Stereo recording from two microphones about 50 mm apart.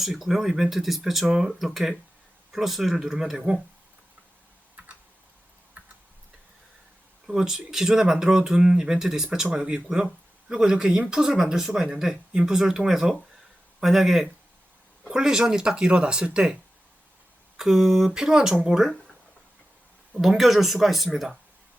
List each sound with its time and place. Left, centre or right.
0.0 s speech: centre
4.8 s typing: right
7.3 s speech: centre
17.6 s speech: centre
20.1 s speech: centre